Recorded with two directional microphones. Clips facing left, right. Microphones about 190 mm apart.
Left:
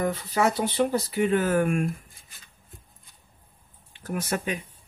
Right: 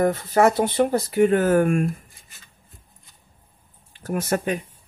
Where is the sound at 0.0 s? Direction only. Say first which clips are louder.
Right 6 dB; 50° right (ahead or behind).